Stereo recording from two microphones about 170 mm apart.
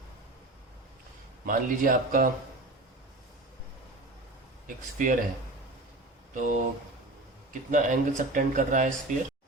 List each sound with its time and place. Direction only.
1.5 s speech: 55° right (ahead or behind)
4.6 s speech: 50° right (ahead or behind)
6.3 s speech: 50° right (ahead or behind)
7.7 s speech: 45° right (ahead or behind)